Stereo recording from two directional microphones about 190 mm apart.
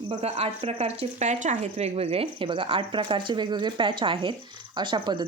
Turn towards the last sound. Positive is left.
turn(degrees=-25)  # may be behind; listen again after turning